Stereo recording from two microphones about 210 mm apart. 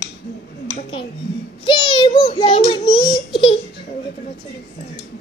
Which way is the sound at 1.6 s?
20° left (ahead or behind).